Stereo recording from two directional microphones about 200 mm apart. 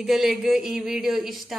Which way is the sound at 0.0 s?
Centre (ahead or behind).